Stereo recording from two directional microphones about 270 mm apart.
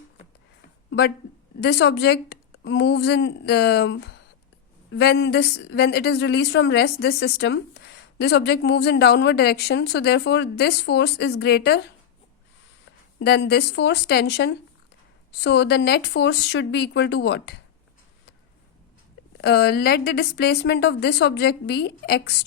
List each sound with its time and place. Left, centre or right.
0.9 s speech: left
13.1 s speech: left
19.4 s speech: left